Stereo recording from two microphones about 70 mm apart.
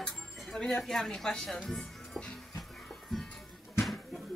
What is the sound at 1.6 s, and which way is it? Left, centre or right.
Music, centre.